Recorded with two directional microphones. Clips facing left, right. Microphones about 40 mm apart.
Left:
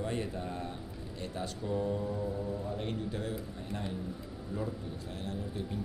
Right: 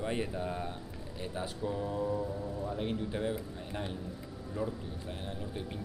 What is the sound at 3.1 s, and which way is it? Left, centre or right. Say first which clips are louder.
Speech: right 3 dB; right.